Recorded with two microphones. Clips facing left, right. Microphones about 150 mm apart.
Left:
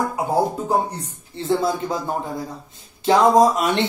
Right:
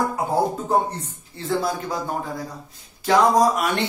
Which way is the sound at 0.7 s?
10° left (ahead or behind).